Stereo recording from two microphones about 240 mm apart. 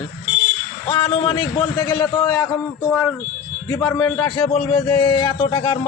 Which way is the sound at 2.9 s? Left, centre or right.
Centre.